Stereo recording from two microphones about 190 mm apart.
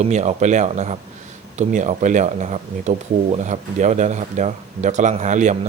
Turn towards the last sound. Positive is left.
turn(degrees=-40)  # may be behind; listen again after turning